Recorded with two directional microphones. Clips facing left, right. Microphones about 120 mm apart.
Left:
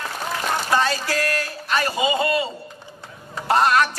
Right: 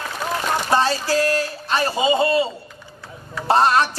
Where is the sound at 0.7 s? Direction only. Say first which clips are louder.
Right 3 dB; 30° right (ahead or behind).